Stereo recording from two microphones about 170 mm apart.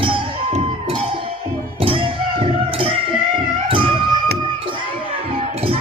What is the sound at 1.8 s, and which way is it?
Music, 30° right (ahead or behind).